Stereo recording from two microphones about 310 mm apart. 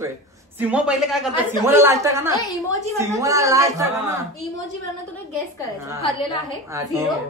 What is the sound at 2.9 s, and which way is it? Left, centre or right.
Speech, centre.